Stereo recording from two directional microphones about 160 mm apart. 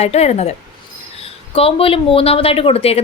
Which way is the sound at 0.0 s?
40° left (ahead or behind).